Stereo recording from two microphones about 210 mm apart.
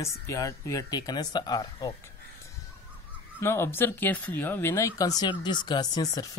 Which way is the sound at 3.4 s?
10° left (ahead or behind).